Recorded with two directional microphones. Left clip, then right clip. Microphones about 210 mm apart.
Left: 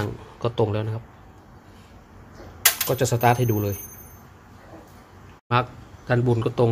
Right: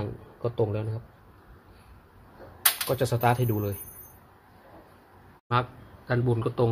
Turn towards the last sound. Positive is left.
turn(degrees=10)  # may be behind; listen again after turning